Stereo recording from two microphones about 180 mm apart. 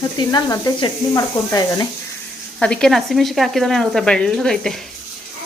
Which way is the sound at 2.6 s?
5° left (ahead or behind).